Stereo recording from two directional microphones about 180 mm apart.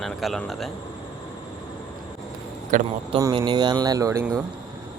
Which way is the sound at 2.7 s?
45° right (ahead or behind).